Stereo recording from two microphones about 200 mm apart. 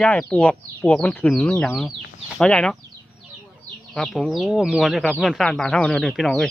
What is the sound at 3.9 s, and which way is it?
Speech, centre (ahead or behind).